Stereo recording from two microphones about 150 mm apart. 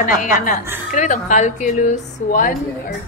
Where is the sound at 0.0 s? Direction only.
60° left (ahead or behind).